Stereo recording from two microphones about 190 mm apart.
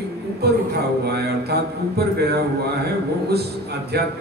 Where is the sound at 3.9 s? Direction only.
55° right (ahead or behind).